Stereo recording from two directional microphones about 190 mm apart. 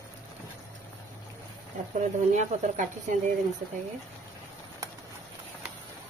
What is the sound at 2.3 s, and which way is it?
Speech, 40° right (ahead or behind).